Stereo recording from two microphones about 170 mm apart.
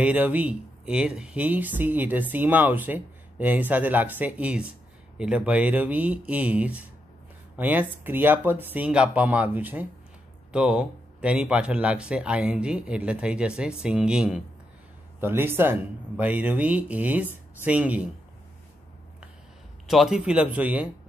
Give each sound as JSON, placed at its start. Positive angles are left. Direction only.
{"t": 0.0, "sound": "speech", "side_deg": -10}
{"t": 19.9, "sound": "speech", "side_deg": 0}